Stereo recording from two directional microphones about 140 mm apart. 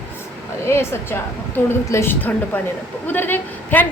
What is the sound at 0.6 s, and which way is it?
A woman's voice, 20° left (ahead or behind).